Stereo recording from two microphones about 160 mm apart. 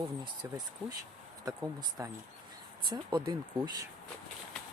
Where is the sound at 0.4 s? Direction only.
25° right (ahead or behind).